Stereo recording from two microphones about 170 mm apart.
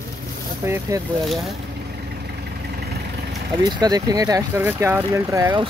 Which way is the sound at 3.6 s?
25° right (ahead or behind).